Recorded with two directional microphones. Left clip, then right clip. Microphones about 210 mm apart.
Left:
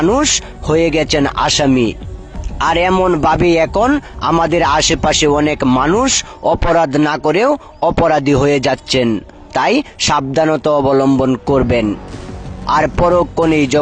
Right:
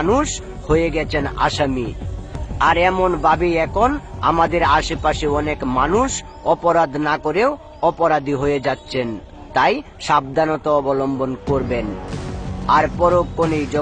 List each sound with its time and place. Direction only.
0.0 s a man's voice: 45° left (ahead or behind)